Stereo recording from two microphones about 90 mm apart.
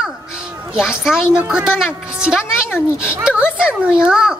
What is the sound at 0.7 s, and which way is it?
A woman's voice, 5° right (ahead or behind).